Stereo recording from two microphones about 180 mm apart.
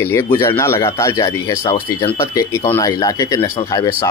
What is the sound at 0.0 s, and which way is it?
Speech, 15° left (ahead or behind).